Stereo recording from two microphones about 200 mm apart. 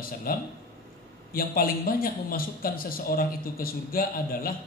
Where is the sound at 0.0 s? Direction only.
45° left (ahead or behind).